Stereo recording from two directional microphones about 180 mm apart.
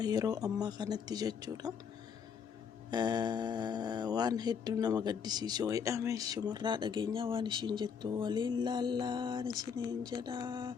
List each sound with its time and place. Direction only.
0.0 s speech: 20° right (ahead or behind)
2.9 s speech: 20° right (ahead or behind)